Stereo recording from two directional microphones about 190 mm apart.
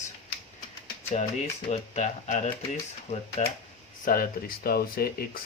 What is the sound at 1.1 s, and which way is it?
Speech, 35° left (ahead or behind).